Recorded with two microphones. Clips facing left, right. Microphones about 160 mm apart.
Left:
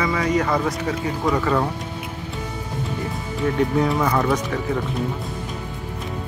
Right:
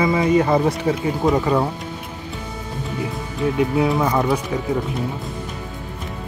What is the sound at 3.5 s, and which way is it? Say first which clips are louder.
Speech: right 1 dB; 5° right (ahead or behind).